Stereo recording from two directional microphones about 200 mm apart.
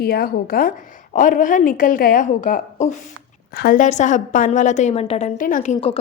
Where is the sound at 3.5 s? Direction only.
50° left (ahead or behind); by 6.0 s 30° left (ahead or behind).